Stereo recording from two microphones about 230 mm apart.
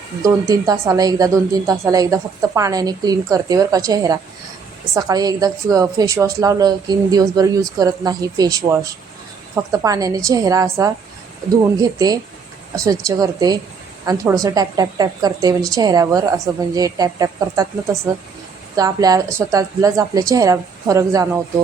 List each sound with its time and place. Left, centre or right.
0.2 s a woman's voice: centre